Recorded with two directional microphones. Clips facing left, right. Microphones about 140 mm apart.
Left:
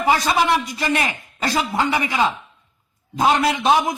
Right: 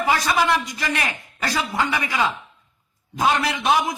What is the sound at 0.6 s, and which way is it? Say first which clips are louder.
A man's voice: left 4 dB; 30° left (ahead or behind).